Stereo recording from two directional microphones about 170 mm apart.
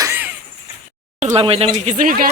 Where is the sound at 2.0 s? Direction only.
55° right (ahead or behind).